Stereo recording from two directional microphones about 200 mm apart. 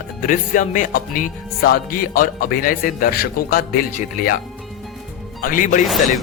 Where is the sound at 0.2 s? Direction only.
40° left (ahead or behind).